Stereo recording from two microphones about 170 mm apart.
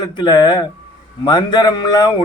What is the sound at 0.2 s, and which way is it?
A man's voice, 25° left (ahead or behind).